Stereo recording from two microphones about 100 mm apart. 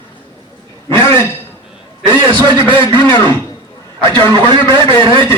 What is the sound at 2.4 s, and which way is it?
Speech, 50° right (ahead or behind).